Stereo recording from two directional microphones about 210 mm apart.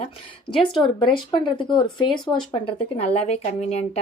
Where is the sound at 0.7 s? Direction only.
20° left (ahead or behind).